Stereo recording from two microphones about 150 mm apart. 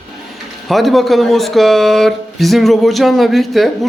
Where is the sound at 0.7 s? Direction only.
Centre (ahead or behind).